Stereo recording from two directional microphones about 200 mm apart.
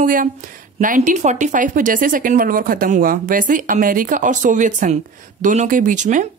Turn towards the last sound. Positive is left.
turn(degrees=-40)  # may be behind; listen again after turning